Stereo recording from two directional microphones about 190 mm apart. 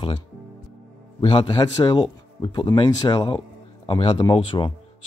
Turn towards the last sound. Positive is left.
turn(degrees=25)  # may be behind; listen again after turning